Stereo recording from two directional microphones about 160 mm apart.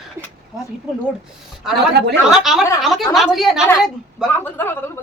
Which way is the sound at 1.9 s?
90° right.